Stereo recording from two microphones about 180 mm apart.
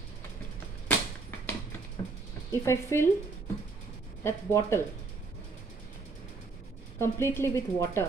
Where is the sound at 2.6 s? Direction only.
15° left (ahead or behind).